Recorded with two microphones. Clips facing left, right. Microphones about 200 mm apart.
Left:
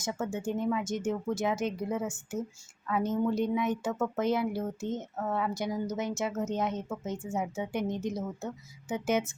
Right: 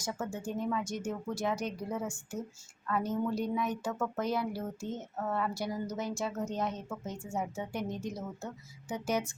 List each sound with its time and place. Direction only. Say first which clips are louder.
0.0 s speech: left 4 dB; 25° left (ahead or behind)